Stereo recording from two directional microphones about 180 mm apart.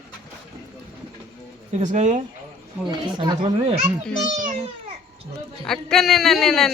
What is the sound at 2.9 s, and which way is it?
Speech, 25° right (ahead or behind).